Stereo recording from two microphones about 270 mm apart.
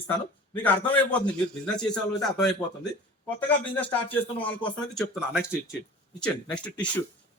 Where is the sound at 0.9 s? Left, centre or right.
Centre.